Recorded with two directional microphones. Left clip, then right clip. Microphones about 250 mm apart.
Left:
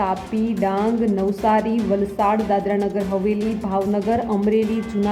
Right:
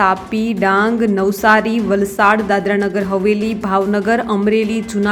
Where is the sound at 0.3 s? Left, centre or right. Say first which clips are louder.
Right 7 dB; centre.